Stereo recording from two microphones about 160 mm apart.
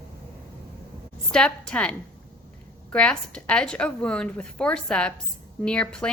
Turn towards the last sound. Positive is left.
turn(degrees=5)  # may be behind; listen again after turning